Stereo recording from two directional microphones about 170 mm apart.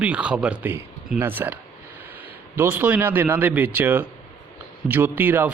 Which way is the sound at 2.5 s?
10° right (ahead or behind).